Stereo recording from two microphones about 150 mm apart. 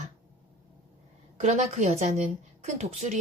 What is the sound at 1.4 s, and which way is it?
A woman's voice, 50° right (ahead or behind).